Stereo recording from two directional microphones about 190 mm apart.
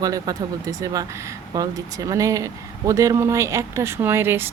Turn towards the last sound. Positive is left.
turn(degrees=-10)  # may be behind; listen again after turning